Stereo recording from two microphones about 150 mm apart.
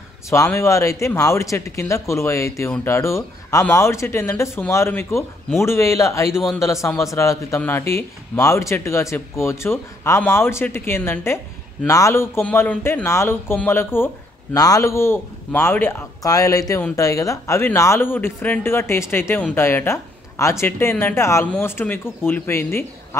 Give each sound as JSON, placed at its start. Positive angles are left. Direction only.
{"t": 0.3, "sound": "speech", "side_deg": 20}